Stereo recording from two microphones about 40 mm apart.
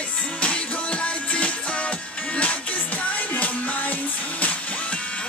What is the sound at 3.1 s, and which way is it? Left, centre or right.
Music, left.